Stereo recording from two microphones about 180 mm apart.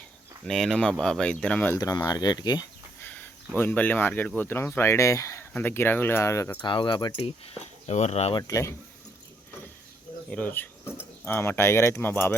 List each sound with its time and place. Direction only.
0.4 s speech: centre (ahead or behind); by 2.6 s 25° left (ahead or behind)
3.0 s a sound: 10° left (ahead or behind)
3.6 s speech: 10° left (ahead or behind)
6.7 s speech: 25° left (ahead or behind)
8.4 s speech: 20° left (ahead or behind)
10.2 s speech: 10° left (ahead or behind)